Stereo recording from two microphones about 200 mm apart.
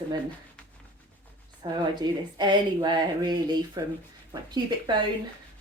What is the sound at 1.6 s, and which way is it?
Speech, 20° right (ahead or behind).